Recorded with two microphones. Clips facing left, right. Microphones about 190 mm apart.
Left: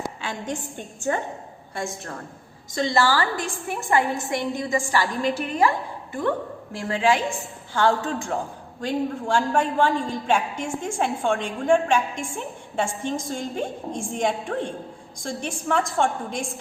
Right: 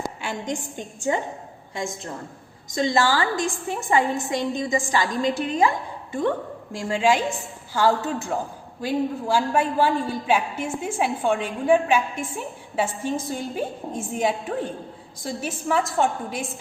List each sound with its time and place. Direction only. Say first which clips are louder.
0.2 s a woman's voice: right 1 dB; 10° right (ahead or behind)
6.7 s a woman's voice: right 1 dB; 10° right (ahead or behind)